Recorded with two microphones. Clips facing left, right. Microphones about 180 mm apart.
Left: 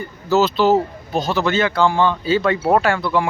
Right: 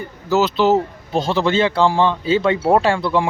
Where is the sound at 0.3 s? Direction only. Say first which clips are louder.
Even; 15° right (ahead or behind).